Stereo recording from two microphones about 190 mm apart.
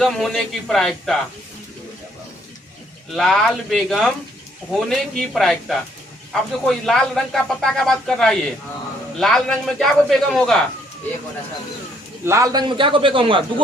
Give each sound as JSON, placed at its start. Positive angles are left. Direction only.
{"t": 0.0, "sound": "a man's voice", "side_deg": 0}
{"t": 3.1, "sound": "a man's voice", "side_deg": 0}
{"t": 12.2, "sound": "a man's voice", "side_deg": -15}